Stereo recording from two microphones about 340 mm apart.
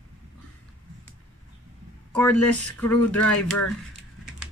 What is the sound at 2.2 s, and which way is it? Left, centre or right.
Speech, centre.